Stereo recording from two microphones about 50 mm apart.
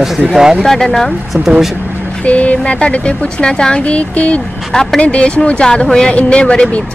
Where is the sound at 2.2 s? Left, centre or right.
Left.